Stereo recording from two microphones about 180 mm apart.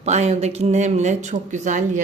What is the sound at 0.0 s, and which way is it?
Speech, 40° right (ahead or behind).